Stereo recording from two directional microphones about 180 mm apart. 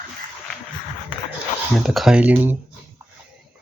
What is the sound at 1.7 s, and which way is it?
Speech, centre (ahead or behind).